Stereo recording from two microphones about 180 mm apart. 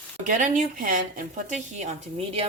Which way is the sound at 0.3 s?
45° right (ahead or behind).